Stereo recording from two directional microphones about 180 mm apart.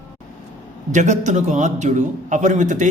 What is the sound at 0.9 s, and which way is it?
A man's voice, 40° right (ahead or behind).